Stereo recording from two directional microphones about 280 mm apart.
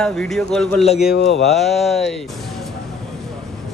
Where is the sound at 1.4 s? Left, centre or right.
Centre.